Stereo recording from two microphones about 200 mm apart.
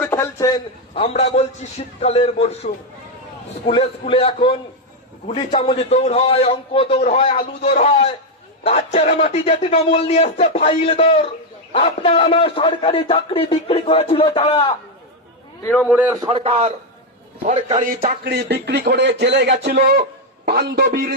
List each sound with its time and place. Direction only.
0.0 s a man's voice: 15° left (ahead or behind)
0.9 s speech: 30° left (ahead or behind)
3.7 s a man's voice: 25° left (ahead or behind)
15.8 s a man's voice: 5° right (ahead or behind)
16.3 s a man's voice: 30° right (ahead or behind)
18.3 s a man's voice: 55° right (ahead or behind)